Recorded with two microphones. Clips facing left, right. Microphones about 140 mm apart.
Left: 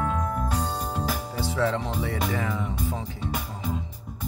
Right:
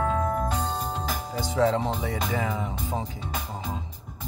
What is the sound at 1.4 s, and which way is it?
Speech, 15° right (ahead or behind).